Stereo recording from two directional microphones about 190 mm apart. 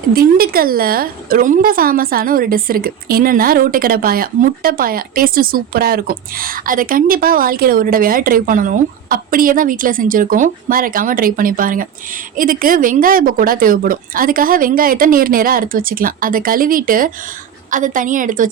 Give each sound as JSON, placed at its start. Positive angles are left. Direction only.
{"t": 0.1, "sound": "a woman's voice", "side_deg": -50}